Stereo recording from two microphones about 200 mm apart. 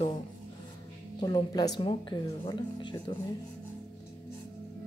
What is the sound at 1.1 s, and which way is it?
Speech, 20° left (ahead or behind).